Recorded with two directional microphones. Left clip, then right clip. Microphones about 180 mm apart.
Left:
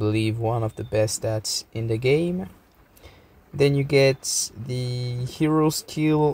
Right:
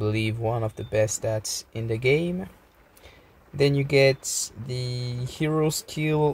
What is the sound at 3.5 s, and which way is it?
Speech, 15° left (ahead or behind).